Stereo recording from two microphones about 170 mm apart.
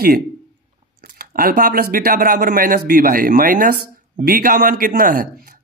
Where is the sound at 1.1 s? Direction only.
60° right (ahead or behind).